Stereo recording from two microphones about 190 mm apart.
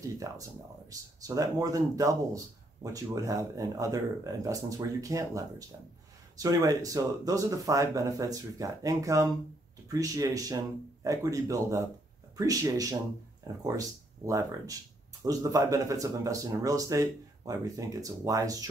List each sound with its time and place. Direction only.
0.2 s speech: 20° right (ahead or behind)